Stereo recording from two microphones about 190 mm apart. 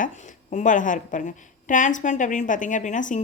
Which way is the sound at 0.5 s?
40° left (ahead or behind).